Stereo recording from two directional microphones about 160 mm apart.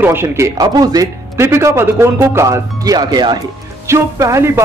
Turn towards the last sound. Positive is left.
turn(degrees=-15)  # may be behind; listen again after turning